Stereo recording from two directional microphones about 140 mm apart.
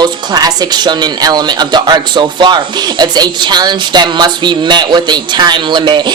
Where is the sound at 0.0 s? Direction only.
30° right (ahead or behind).